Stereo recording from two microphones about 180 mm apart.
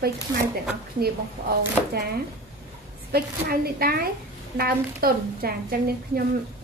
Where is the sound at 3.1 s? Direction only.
60° right (ahead or behind).